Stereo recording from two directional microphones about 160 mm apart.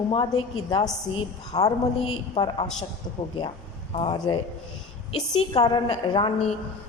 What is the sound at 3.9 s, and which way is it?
A woman's voice, 35° left (ahead or behind).